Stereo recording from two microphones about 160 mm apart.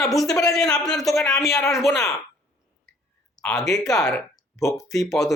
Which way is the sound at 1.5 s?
20° left (ahead or behind).